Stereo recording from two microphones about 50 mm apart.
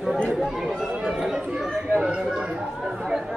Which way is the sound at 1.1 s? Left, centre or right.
Centre.